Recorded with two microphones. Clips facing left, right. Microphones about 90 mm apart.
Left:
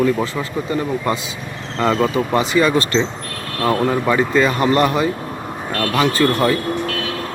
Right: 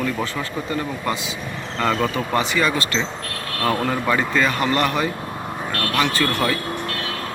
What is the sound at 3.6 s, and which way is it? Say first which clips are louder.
Speech: left 4 dB; 15° left (ahead or behind).